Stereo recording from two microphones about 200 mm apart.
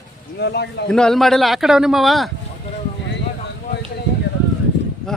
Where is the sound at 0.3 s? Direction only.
55° left (ahead or behind).